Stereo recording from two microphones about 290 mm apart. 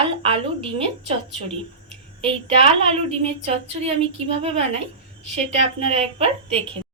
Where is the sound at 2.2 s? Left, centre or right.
Centre.